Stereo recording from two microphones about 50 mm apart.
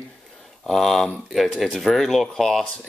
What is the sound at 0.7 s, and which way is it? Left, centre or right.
Speech, centre.